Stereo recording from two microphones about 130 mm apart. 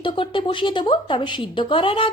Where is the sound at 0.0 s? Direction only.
40° left (ahead or behind).